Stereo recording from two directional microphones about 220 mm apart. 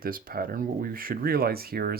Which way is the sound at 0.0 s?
40° right (ahead or behind).